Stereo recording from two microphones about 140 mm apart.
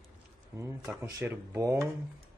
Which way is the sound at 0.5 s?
20° right (ahead or behind).